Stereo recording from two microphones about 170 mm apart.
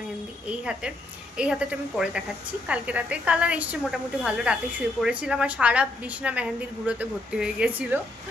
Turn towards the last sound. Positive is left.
turn(degrees=-10)  # may be behind; listen again after turning